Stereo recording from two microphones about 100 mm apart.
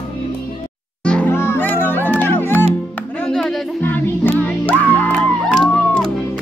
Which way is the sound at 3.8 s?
20° left (ahead or behind).